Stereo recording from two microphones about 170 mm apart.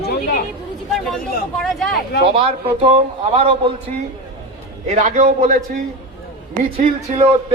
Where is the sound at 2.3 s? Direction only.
35° right (ahead or behind).